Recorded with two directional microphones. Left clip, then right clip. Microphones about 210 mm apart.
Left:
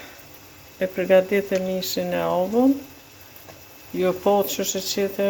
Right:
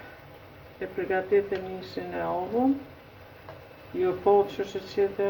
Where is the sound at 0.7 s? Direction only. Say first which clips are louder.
Left 11 dB; 55° left (ahead or behind).